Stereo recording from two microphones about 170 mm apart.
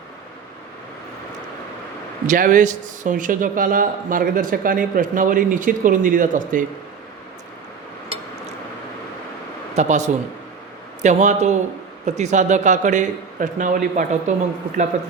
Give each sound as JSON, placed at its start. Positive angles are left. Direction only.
{"t": 2.2, "sound": "speech", "side_deg": -50}
{"t": 9.7, "sound": "speech", "side_deg": -45}